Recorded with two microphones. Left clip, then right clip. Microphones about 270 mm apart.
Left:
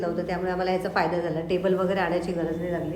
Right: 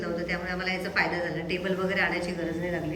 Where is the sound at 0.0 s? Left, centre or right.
Centre.